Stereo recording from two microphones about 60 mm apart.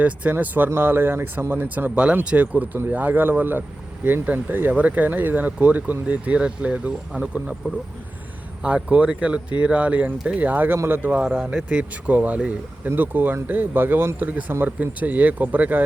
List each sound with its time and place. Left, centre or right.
0.0 s speech: right
1.6 s speech: right
8.6 s speech: right
11.5 s speech: right